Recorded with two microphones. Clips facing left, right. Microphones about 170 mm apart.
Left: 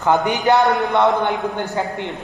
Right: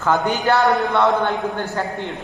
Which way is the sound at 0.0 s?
20° left (ahead or behind).